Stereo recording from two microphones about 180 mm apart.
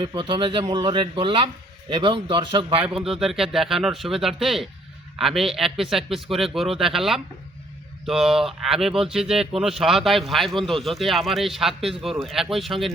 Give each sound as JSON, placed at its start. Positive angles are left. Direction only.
{"t": 0.0, "sound": "a man's voice", "side_deg": -25}
{"t": 2.8, "sound": "speech", "side_deg": -5}